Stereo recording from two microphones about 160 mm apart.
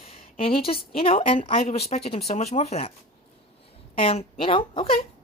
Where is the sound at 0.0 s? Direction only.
35° left (ahead or behind).